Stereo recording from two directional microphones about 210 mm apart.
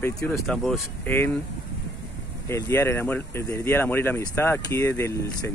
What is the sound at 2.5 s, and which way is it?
Speech, 10° left (ahead or behind).